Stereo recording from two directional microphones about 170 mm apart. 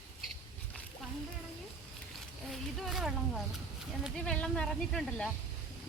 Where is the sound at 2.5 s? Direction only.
Centre (ahead or behind).